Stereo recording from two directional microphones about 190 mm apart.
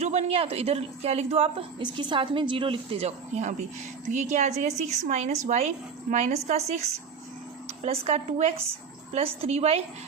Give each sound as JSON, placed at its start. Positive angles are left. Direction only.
{"t": 0.0, "sound": "a woman's voice", "side_deg": -35}